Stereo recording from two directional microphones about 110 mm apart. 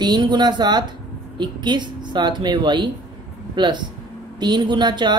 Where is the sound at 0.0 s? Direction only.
40° right (ahead or behind).